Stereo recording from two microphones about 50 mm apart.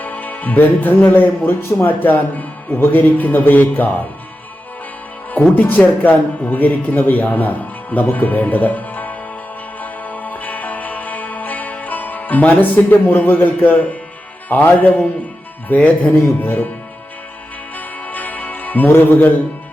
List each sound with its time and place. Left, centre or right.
0.0 s music: left
1.1 s speech: left
5.5 s speech: left
9.8 s music: left
14.5 s speech: left
16.1 s speech: left
17.7 s music: left